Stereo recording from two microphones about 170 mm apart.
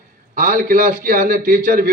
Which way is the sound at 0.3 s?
55° right (ahead or behind).